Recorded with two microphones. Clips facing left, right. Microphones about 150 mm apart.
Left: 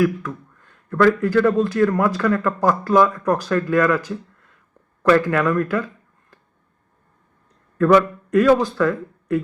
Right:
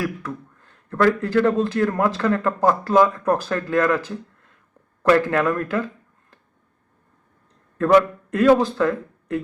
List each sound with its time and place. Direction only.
0.9 s speech: 35° right (ahead or behind)
7.8 s a man's voice: 25° right (ahead or behind)